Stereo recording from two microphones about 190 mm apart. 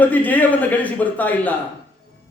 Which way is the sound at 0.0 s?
10° left (ahead or behind).